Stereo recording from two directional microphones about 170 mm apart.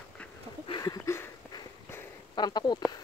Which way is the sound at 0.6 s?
25° left (ahead or behind).